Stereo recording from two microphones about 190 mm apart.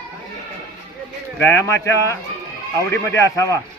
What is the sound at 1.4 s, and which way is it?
A man's voice, 15° left (ahead or behind).